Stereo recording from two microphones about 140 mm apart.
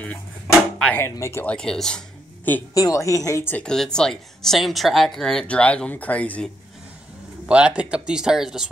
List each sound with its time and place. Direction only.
0.7 s speech: 10° left (ahead or behind)
1.0 s a woman's voice: 20° left (ahead or behind)
1.4 s speech: 5° left (ahead or behind)
2.7 s a woman's voice: 25° left (ahead or behind)
3.6 s speech: 5° left (ahead or behind)
7.4 s speech: 10° right (ahead or behind)